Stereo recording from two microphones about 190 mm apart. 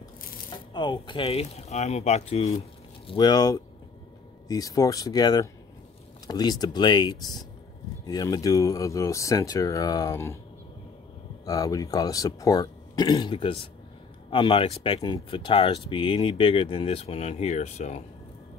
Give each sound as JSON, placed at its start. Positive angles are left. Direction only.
{"t": 0.7, "sound": "speech", "side_deg": 25}
{"t": 3.1, "sound": "speech", "side_deg": 20}
{"t": 11.4, "sound": "speech", "side_deg": 20}